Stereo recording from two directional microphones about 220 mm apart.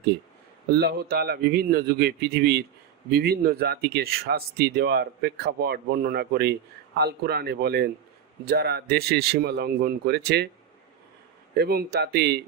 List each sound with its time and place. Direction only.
0.7 s speech: 45° right (ahead or behind)
11.5 s speech: 45° right (ahead or behind)